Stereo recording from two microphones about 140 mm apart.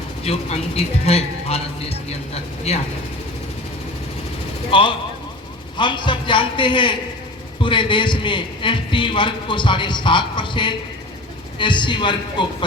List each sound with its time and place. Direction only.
0.3 s a man's voice: 45° left (ahead or behind)
4.7 s a man's voice: 35° left (ahead or behind)